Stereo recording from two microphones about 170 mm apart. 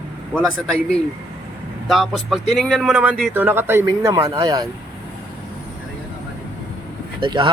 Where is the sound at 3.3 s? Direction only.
15° right (ahead or behind).